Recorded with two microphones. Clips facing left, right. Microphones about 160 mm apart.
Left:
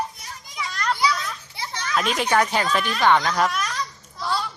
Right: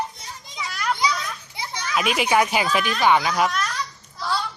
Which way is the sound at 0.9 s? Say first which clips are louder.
Left 1 dB; 15° right (ahead or behind).